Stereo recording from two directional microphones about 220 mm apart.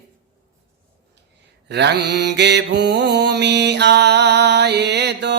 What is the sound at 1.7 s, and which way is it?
Mantra, 50° right (ahead or behind).